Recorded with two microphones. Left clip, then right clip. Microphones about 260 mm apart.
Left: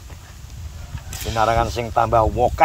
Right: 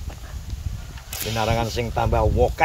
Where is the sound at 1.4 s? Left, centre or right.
Centre.